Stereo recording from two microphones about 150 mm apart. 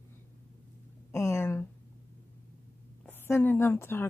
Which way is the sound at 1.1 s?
20° left (ahead or behind).